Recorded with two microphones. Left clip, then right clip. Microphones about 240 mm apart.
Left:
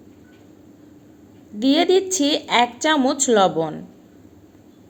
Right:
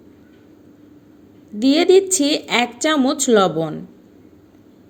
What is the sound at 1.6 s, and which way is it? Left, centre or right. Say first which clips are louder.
Speech: right 3 dB; right.